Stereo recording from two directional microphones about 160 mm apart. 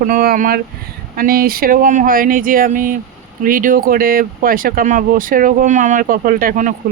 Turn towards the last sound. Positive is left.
turn(degrees=-55)  # may be behind; listen again after turning